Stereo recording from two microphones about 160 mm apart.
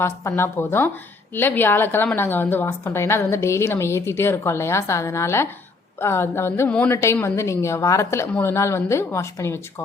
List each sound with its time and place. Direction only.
0.0 s a woman's voice: 15° left (ahead or behind)